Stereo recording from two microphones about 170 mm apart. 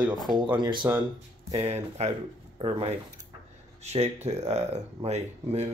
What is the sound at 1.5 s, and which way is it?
Speech, 40° right (ahead or behind).